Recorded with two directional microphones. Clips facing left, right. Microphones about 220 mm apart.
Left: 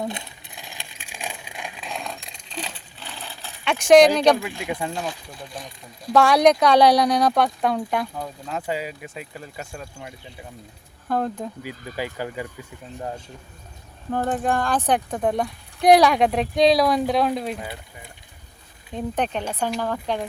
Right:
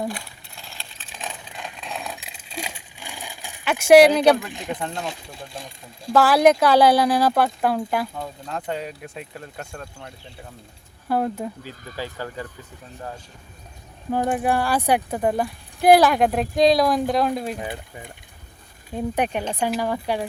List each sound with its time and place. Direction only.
0.1 s a sound: 20° left (ahead or behind)
1.9 s a sound: 5° right (ahead or behind)
4.6 s speech: 10° left (ahead or behind)
5.0 s speech: 25° right (ahead or behind)
6.1 s speech: 5° right (ahead or behind)
11.1 s speech: 5° right (ahead or behind)
11.6 s speech: 15° left (ahead or behind)
14.1 s speech: 10° right (ahead or behind)
18.9 s speech: 10° right (ahead or behind)